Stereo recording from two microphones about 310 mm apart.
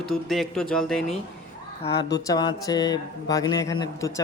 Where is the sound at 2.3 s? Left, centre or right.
Centre.